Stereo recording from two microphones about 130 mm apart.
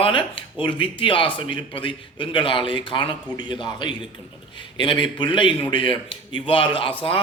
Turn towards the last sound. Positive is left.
turn(degrees=45)  # may be behind; listen again after turning